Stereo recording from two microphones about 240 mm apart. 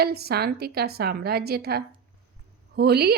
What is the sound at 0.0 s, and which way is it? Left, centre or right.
A woman's voice, right.